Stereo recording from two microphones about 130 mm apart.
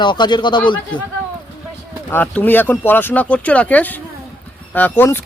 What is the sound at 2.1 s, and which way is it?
Speech, 15° left (ahead or behind).